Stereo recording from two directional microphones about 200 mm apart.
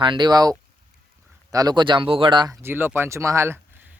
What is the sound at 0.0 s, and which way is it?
Speech, 25° right (ahead or behind).